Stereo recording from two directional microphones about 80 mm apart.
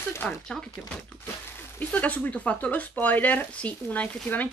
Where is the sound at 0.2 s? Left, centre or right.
Centre.